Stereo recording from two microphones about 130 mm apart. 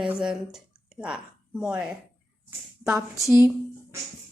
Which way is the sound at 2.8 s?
25° right (ahead or behind).